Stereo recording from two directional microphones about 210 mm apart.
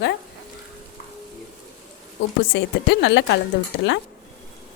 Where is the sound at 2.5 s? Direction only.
55° left (ahead or behind).